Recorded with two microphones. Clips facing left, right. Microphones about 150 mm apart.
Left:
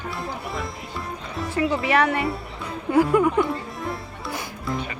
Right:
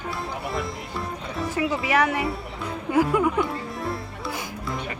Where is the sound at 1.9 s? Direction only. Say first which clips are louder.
Even; 15° right (ahead or behind).